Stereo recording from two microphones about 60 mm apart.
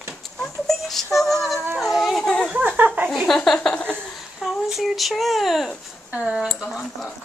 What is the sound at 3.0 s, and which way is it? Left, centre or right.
Speech, centre.